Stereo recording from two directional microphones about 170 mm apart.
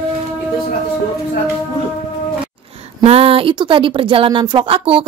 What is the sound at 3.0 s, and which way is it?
Speech, 35° right (ahead or behind).